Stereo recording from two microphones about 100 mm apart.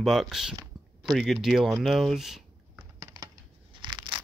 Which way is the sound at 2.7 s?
35° right (ahead or behind).